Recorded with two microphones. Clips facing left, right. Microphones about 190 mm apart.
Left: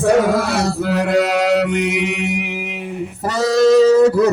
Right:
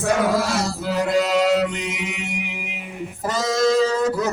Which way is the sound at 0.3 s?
60° left (ahead or behind).